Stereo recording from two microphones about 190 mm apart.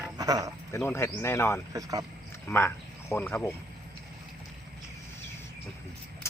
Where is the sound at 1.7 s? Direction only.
20° right (ahead or behind).